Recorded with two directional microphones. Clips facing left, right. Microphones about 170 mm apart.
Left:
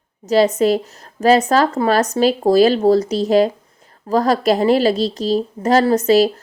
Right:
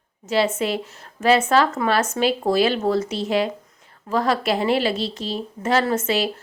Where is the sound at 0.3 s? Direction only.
40° left (ahead or behind).